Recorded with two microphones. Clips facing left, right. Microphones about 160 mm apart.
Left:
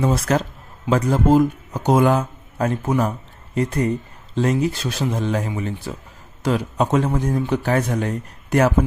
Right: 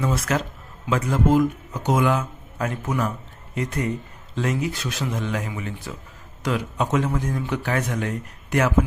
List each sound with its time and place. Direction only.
0.0 s speech: 35° left (ahead or behind)